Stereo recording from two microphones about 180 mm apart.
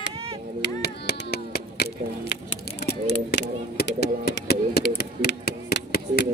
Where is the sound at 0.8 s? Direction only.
60° left (ahead or behind).